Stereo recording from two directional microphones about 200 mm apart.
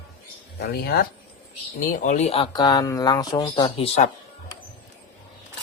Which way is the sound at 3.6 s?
30° left (ahead or behind).